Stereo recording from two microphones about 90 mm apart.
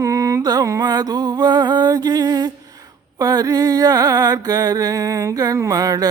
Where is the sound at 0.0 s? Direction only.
35° right (ahead or behind).